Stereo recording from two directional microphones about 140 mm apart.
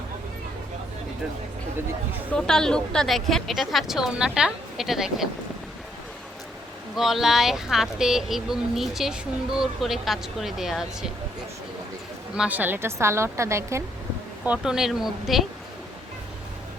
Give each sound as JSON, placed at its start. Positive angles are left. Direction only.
{"t": 2.3, "sound": "speech", "side_deg": 5}
{"t": 6.9, "sound": "speech", "side_deg": 0}
{"t": 12.4, "sound": "a woman's voice", "side_deg": -10}
{"t": 14.4, "sound": "speech", "side_deg": -5}